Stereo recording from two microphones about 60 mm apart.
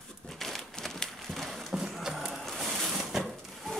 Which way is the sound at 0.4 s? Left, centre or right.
Centre.